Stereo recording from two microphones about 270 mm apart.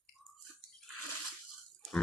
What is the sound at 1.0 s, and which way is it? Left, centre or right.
Crunch, right.